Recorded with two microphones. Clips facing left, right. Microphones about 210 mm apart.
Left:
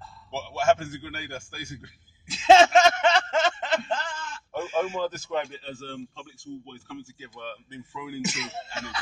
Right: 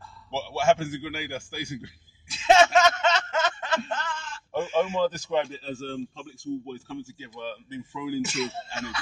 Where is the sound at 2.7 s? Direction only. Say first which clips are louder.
Left 2 dB; 30° left (ahead or behind).